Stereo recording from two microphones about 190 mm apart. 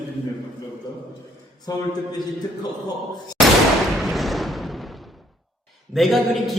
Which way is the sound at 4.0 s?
Centre (ahead or behind).